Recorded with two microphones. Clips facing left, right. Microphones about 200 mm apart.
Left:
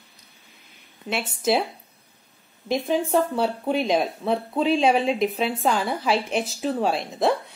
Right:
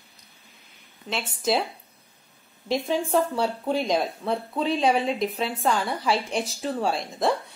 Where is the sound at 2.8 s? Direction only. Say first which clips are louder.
Left 2 dB; centre (ahead or behind).